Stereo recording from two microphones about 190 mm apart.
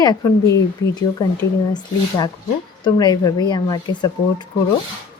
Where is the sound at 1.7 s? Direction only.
20° left (ahead or behind).